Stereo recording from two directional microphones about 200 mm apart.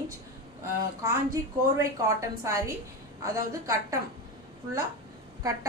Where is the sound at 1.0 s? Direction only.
15° right (ahead or behind).